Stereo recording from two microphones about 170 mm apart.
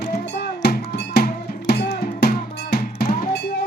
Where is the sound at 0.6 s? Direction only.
70° left (ahead or behind).